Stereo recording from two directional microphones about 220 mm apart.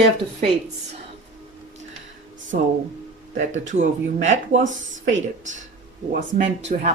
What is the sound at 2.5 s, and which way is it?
Speech, 35° right (ahead or behind).